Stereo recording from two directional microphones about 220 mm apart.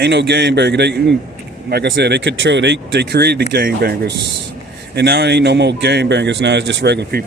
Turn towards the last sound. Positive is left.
turn(degrees=-50)  # may be behind; listen again after turning